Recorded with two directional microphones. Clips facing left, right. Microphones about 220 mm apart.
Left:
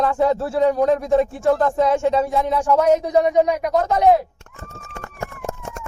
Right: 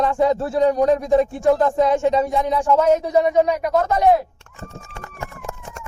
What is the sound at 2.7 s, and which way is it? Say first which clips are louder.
Speech: left 1 dB; 15° left (ahead or behind).